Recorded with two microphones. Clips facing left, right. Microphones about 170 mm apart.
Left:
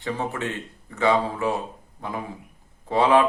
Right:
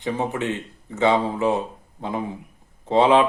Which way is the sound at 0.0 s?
20° right (ahead or behind).